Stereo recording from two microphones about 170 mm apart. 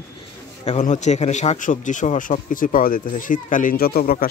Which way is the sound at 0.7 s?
45° left (ahead or behind).